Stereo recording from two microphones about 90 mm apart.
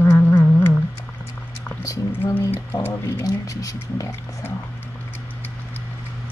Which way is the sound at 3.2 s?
40° left (ahead or behind).